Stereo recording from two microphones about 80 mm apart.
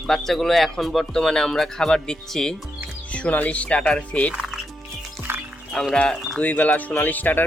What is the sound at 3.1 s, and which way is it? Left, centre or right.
Speech, centre.